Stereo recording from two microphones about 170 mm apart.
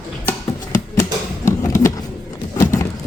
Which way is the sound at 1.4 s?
15° left (ahead or behind).